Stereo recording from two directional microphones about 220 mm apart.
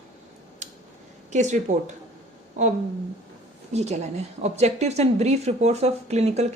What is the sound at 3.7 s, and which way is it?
A woman's voice, 30° right (ahead or behind).